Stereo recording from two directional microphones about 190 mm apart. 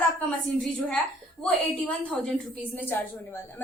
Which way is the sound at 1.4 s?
5° left (ahead or behind).